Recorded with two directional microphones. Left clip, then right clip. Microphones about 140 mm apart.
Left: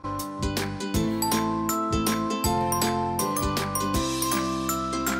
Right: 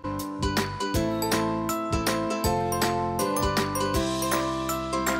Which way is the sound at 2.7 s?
Centre (ahead or behind).